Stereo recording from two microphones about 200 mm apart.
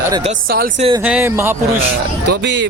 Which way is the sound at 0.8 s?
25° right (ahead or behind).